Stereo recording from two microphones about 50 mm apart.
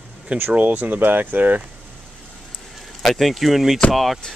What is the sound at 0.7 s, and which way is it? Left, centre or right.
Speech, right.